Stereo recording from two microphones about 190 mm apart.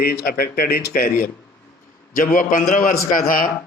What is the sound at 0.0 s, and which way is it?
A man's voice, 55° left (ahead or behind).